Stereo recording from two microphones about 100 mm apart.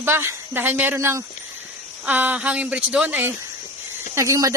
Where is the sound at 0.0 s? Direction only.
25° right (ahead or behind).